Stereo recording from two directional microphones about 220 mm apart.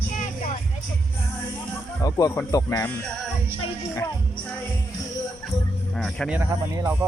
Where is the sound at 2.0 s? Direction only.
15° left (ahead or behind).